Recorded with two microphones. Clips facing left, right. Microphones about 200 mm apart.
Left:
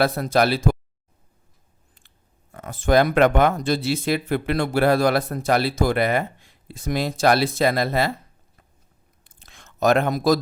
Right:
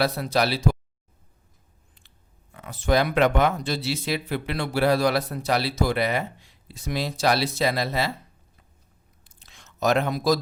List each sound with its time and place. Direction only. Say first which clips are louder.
0.0 s speech: left 4 dB; 50° left (ahead or behind)
2.0 s speech: even; 45° left (ahead or behind)
9.2 s a sound: left 3 dB; 55° left (ahead or behind)